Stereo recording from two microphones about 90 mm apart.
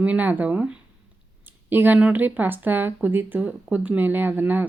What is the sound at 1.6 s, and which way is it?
A woman's voice, 20° right (ahead or behind).